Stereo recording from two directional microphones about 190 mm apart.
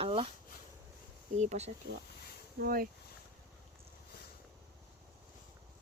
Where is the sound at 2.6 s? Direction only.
50° right (ahead or behind).